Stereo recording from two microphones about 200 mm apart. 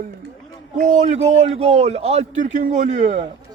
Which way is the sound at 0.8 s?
35° right (ahead or behind).